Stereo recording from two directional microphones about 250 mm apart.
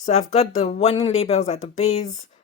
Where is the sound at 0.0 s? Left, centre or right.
Left.